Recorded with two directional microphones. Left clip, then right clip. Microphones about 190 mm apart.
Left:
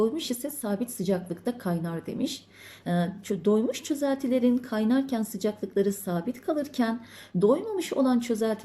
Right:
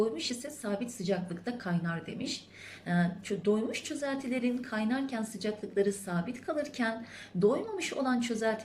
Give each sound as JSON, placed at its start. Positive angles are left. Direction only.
{"t": 0.3, "sound": "a woman's voice", "side_deg": 25}